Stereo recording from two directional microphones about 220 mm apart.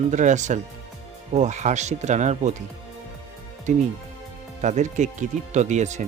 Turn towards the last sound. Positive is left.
turn(degrees=-35)  # may be behind; listen again after turning